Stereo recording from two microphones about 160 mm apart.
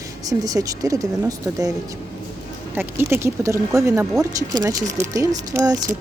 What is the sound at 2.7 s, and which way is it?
Speech, 15° right (ahead or behind).